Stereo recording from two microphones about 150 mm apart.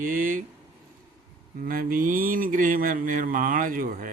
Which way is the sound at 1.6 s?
70° right (ahead or behind).